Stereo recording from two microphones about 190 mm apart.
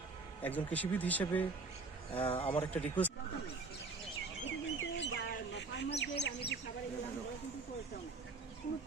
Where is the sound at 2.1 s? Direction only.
30° left (ahead or behind).